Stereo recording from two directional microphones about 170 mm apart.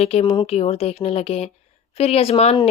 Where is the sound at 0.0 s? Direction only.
35° left (ahead or behind).